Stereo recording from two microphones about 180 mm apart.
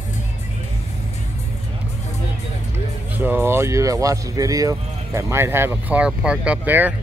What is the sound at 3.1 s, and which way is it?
Speech, 10° right (ahead or behind).